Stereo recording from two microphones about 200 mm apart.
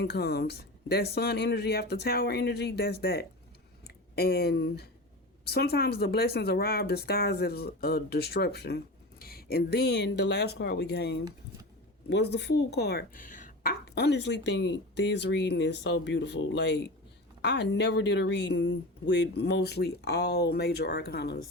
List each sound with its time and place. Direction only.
0.0 s speech: 55° left (ahead or behind)